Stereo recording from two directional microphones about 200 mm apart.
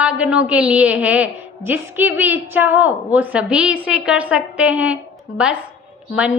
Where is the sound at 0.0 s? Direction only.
5° right (ahead or behind).